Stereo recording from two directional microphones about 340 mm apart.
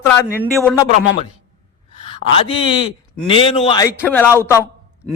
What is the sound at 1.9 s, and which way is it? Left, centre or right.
A man's voice, centre.